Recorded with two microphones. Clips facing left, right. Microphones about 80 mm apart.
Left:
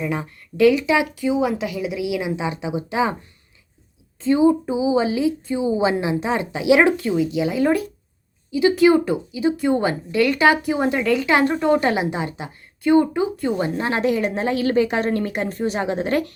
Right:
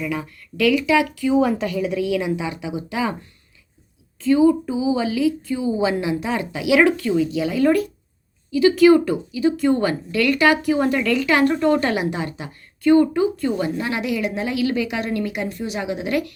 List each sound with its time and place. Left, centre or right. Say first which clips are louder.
0.0 s a woman's voice: left 1 dB; left
1.4 s speech: right 3 dB; centre; by 3.2 s left
4.2 s a woman's voice: right 1 dB; left
13.7 s a woman's voice: left 3 dB; left